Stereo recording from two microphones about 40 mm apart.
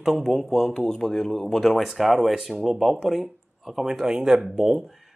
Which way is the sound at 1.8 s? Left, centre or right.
Centre.